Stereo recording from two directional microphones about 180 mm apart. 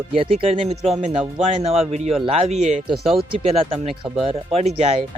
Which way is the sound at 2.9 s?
Centre (ahead or behind).